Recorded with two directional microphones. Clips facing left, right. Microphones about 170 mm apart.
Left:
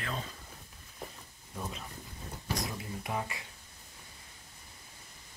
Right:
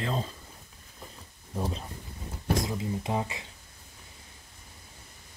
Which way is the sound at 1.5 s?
35° right (ahead or behind).